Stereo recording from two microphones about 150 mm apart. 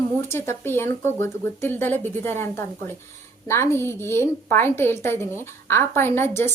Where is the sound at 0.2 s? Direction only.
15° left (ahead or behind).